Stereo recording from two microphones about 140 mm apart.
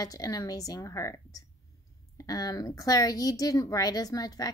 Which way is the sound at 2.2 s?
25° left (ahead or behind).